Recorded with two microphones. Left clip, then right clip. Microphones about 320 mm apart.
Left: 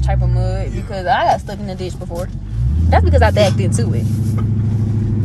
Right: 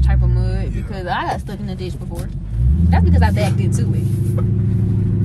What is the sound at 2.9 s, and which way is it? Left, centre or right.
Speech, left.